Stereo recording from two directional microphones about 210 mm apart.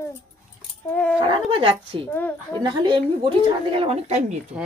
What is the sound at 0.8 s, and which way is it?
Dog, 10° left (ahead or behind).